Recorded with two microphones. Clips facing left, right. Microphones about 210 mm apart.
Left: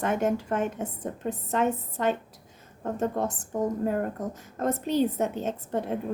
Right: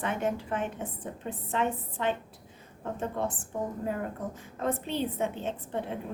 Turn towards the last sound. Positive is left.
turn(degrees=45)  # may be behind; listen again after turning